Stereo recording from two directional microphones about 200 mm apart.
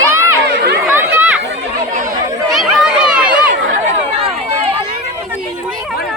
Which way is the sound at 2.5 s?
5° right (ahead or behind).